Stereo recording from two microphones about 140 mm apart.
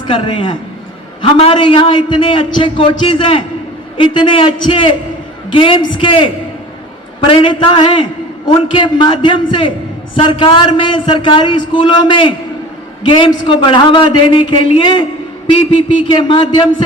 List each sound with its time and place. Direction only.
0.1 s a man's voice: 35° left (ahead or behind)